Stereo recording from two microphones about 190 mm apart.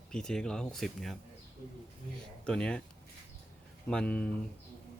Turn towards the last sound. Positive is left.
turn(degrees=5)  # may be behind; listen again after turning